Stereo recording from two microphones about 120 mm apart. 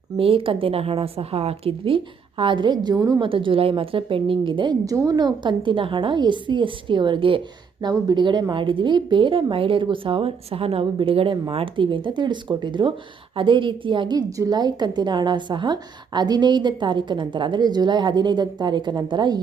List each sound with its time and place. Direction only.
0.2 s a woman's voice: 50° right (ahead or behind); by 3.2 s 30° right (ahead or behind)
3.2 s a woman's voice: 45° right (ahead or behind)